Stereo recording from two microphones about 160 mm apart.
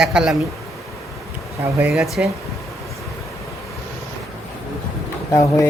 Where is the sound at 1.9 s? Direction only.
Centre (ahead or behind).